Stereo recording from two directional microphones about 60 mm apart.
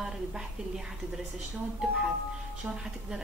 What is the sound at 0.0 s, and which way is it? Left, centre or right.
Speech, centre.